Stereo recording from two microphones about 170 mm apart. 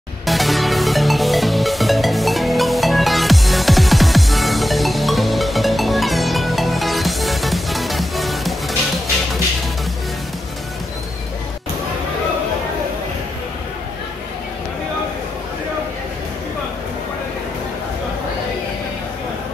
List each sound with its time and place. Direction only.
0.3 s music: centre (ahead or behind)